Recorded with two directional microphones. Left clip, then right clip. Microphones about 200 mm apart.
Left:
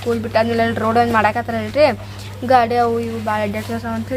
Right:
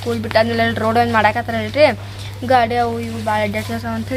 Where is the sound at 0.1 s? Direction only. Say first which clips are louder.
Right 1 dB; 10° right (ahead or behind).